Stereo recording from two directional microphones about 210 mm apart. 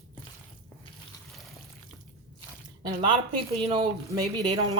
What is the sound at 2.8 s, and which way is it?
Speech, 20° right (ahead or behind).